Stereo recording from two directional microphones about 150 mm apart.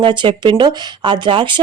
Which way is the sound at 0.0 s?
30° right (ahead or behind).